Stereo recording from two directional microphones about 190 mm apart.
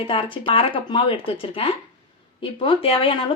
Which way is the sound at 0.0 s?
30° left (ahead or behind).